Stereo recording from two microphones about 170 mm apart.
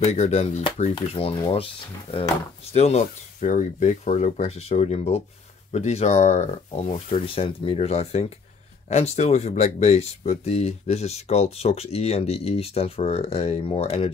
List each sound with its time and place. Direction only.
0.0 s speech: 40° left (ahead or behind)